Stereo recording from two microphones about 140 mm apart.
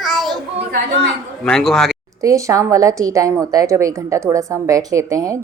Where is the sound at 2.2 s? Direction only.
25° right (ahead or behind).